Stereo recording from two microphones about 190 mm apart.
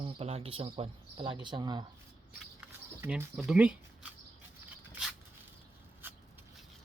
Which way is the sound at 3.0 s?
10° right (ahead or behind).